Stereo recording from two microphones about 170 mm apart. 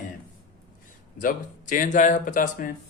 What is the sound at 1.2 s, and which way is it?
Speech, 55° left (ahead or behind).